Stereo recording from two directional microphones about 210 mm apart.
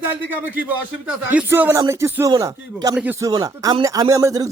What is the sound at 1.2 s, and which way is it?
Speech, 10° right (ahead or behind).